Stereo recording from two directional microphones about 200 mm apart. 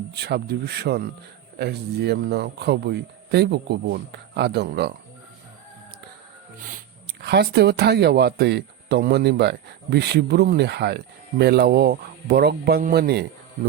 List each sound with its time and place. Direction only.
0.1 s speech: 55° right (ahead or behind)
7.1 s speech: 55° right (ahead or behind)